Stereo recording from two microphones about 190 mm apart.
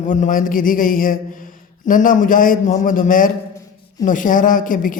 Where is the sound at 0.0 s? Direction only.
40° left (ahead or behind).